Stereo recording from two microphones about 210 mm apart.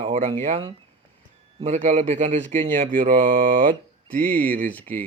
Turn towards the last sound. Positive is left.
turn(degrees=10)  # may be behind; listen again after turning